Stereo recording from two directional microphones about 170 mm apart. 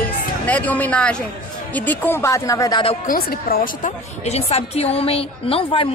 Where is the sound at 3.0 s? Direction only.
60° left (ahead or behind); by 5.9 s 35° left (ahead or behind).